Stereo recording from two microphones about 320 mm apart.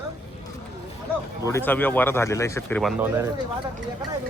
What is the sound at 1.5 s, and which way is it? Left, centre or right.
Speech, centre.